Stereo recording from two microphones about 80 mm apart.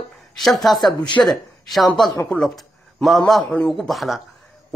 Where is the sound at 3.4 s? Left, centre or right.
Centre.